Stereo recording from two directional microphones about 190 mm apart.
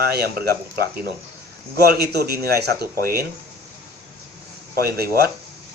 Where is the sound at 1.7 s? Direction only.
55° right (ahead or behind).